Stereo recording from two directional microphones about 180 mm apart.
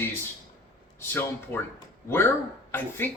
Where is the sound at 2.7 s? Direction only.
10° left (ahead or behind).